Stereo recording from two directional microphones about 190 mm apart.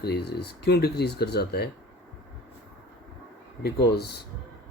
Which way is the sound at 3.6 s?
55° left (ahead or behind).